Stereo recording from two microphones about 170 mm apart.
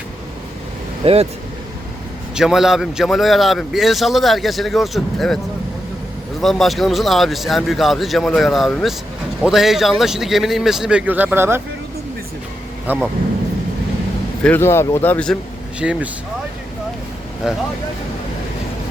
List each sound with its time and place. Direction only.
1.0 s speech: 35° right (ahead or behind)
2.3 s a man's voice: 5° right (ahead or behind)
6.4 s a man's voice: centre (ahead or behind)
12.9 s speech: 10° right (ahead or behind)
14.4 s speech: 15° left (ahead or behind)
15.8 s speech: 5° right (ahead or behind)
17.4 s a man's voice: 5° right (ahead or behind)